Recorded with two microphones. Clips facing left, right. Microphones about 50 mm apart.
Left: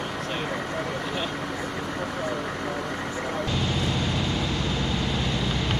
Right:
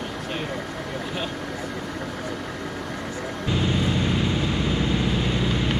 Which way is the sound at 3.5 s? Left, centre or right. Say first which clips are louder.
Right 8 dB; centre.